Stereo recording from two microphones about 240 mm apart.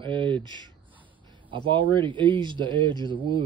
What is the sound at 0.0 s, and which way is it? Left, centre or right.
Speech, centre.